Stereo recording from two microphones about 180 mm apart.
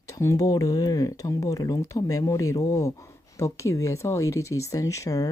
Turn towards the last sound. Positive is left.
turn(degrees=20)  # may be behind; listen again after turning